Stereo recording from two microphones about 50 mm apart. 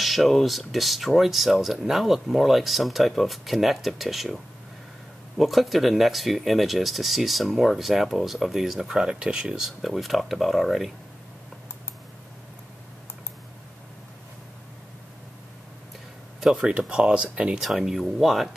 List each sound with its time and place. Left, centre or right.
0.0 s speech: centre
5.4 s speech: centre
9.8 s speech: centre
16.5 s speech: right
17.6 s speech: centre